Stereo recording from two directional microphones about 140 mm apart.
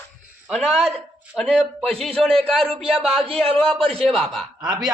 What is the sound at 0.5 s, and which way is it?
A man's voice, 5° left (ahead or behind).